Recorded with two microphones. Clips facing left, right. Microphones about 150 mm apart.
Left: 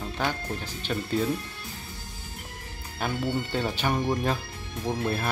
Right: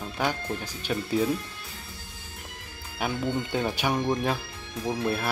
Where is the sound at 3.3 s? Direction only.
10° right (ahead or behind).